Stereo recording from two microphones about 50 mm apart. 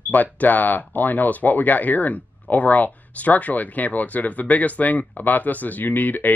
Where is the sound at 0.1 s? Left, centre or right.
Left.